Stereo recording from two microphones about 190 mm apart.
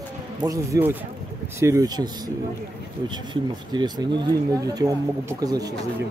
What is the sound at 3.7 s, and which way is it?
Speech, 20° right (ahead or behind).